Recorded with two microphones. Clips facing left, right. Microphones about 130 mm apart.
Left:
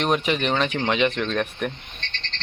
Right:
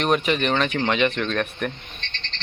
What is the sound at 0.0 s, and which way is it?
Speech, 20° left (ahead or behind).